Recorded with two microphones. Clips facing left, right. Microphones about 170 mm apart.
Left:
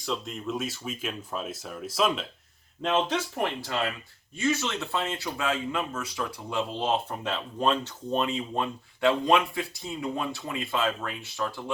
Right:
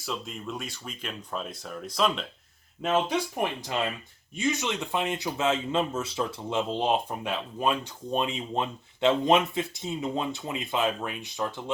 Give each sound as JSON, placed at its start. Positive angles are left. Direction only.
{"t": 0.0, "sound": "speech", "side_deg": 0}
{"t": 2.8, "sound": "speech", "side_deg": -10}